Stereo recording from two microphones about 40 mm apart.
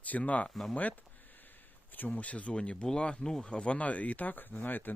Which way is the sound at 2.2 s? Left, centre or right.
Left.